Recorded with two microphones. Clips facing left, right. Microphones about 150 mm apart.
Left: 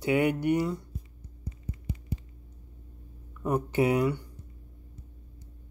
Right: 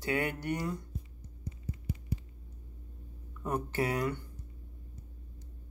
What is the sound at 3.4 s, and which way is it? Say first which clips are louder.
Speech: left 7 dB; 15° left (ahead or behind).